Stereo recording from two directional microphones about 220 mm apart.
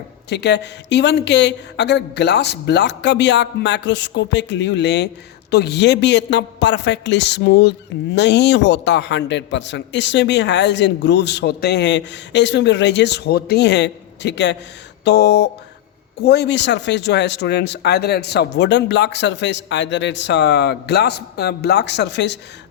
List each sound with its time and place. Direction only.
0.3 s a woman's voice: 50° left (ahead or behind)